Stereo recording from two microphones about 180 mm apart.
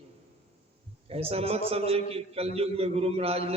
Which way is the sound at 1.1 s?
35° right (ahead or behind).